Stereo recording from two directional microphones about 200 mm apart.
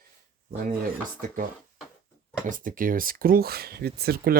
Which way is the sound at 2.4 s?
40° right (ahead or behind).